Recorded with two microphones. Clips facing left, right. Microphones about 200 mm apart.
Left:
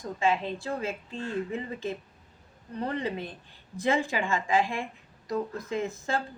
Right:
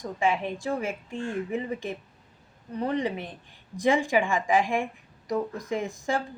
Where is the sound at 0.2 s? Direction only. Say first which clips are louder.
Right 1 dB; 15° right (ahead or behind).